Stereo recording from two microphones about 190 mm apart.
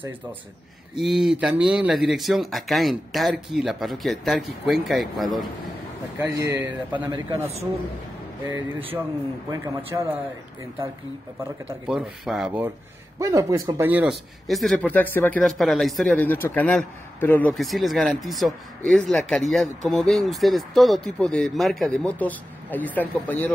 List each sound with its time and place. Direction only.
0.9 s speech: centre (ahead or behind)
6.1 s speech: 15° right (ahead or behind)
8.5 s speech: 10° right (ahead or behind)
11.9 s speech: 5° right (ahead or behind)